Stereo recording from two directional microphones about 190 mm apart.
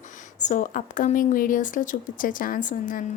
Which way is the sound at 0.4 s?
45° left (ahead or behind).